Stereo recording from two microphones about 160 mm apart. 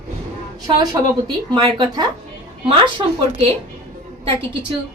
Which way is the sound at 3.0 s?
35° right (ahead or behind).